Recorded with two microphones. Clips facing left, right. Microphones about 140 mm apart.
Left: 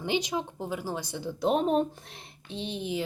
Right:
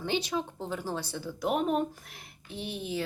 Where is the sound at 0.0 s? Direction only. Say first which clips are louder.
Left 1 dB; 15° left (ahead or behind).